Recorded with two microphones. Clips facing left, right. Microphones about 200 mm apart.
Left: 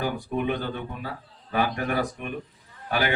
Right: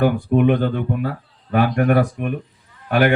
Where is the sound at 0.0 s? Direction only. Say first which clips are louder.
Right 11 dB; 65° right (ahead or behind).